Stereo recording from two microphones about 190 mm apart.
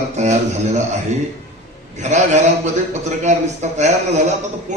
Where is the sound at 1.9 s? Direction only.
35° right (ahead or behind).